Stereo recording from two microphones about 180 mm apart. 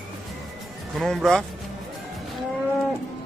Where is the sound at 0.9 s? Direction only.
Centre (ahead or behind).